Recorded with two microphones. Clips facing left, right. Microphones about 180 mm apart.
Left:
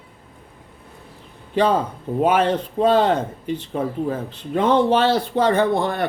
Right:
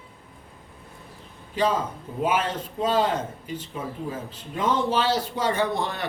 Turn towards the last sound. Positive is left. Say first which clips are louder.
# left 7 dB
turn(degrees=55)  # may be behind; listen again after turning